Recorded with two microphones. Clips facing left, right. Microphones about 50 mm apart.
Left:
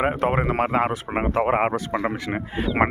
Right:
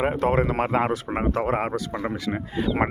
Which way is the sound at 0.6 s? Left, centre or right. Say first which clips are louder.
Left 1 dB; centre.